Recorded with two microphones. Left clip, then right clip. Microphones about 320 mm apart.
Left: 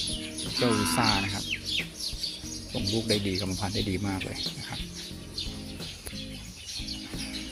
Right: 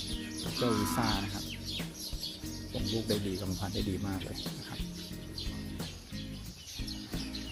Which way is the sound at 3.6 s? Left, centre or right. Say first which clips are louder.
Left 6 dB; right.